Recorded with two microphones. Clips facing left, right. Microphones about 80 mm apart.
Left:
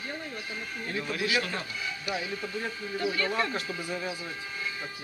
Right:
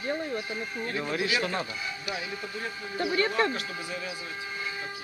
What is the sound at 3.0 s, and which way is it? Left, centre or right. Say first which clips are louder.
Speech: right 3 dB; right.